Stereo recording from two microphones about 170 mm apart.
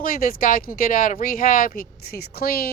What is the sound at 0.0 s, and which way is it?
Speech, 55° left (ahead or behind).